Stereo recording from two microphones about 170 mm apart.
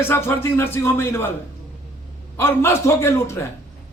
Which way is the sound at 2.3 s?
15° left (ahead or behind).